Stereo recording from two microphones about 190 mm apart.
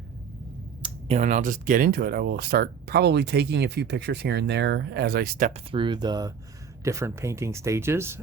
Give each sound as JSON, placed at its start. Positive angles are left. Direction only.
{"t": 0.8, "sound": "speech", "side_deg": -35}
{"t": 5.5, "sound": "speech", "side_deg": -25}